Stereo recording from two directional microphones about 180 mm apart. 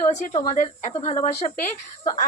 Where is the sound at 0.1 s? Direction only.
40° left (ahead or behind).